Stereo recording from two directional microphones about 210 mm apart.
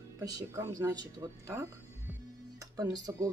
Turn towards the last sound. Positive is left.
turn(degrees=-15)  # may be behind; listen again after turning